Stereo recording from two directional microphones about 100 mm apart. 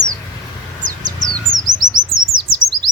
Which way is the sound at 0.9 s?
40° right (ahead or behind).